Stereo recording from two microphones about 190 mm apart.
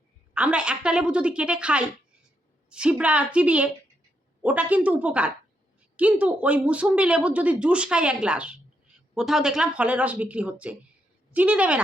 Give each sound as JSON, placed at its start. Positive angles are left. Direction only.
{"t": 0.3, "sound": "a woman's voice", "side_deg": -5}